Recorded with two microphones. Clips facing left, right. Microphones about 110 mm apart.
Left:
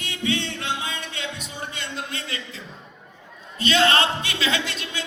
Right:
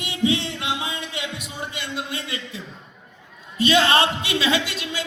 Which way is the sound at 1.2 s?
25° left (ahead or behind).